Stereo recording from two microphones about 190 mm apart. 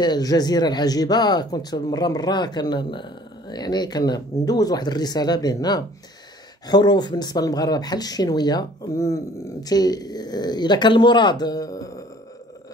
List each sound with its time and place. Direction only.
0.0 s speech: 20° left (ahead or behind)